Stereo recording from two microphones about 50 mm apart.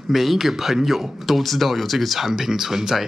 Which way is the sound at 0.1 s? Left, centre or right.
Centre.